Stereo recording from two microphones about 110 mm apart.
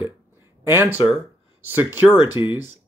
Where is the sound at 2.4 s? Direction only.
50° left (ahead or behind).